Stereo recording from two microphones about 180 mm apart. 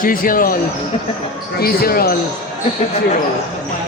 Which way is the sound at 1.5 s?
55° left (ahead or behind).